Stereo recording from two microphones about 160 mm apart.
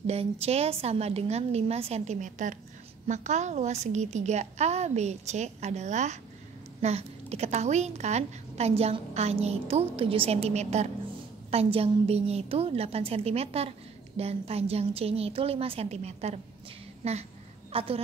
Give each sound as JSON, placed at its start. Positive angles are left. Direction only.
{"t": 0.0, "sound": "a woman's voice", "side_deg": -40}